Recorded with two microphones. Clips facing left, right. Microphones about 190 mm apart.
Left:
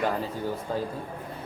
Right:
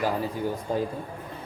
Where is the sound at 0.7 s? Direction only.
15° right (ahead or behind).